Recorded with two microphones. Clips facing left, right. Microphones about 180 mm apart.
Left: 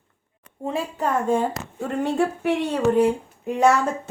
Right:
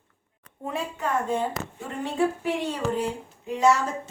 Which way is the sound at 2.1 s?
60° left (ahead or behind).